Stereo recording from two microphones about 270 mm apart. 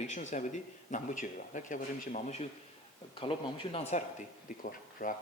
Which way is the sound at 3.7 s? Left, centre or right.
Left.